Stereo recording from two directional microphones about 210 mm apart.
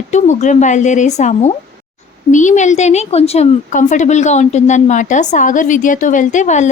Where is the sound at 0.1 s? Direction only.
35° left (ahead or behind).